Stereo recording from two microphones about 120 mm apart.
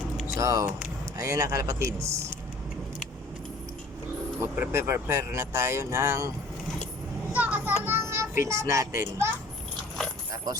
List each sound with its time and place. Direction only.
0.3 s speech: 25° right (ahead or behind)
4.4 s speech: 20° right (ahead or behind)
7.3 s children playing: 15° right (ahead or behind)
7.9 s a child's voice: 20° right (ahead or behind)
10.3 s speech: 30° right (ahead or behind)